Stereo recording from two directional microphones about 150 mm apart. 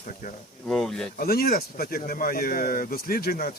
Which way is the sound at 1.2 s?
90° left.